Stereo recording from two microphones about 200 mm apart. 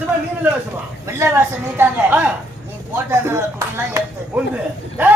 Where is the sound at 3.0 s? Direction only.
10° right (ahead or behind).